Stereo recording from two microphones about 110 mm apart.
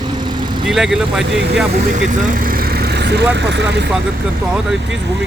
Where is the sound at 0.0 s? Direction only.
40° right (ahead or behind).